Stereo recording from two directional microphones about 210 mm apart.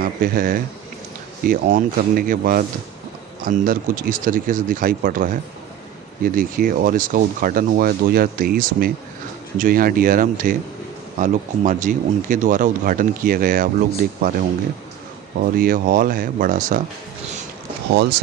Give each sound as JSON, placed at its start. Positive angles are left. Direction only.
{"t": 0.0, "sound": "speech", "side_deg": -45}
{"t": 15.5, "sound": "speech", "side_deg": -45}